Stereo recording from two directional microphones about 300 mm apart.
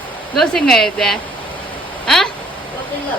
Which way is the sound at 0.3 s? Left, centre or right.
Centre.